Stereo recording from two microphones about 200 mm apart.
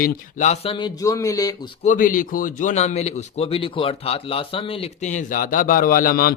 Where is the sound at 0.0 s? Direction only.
35° left (ahead or behind); by 1.5 s 15° left (ahead or behind).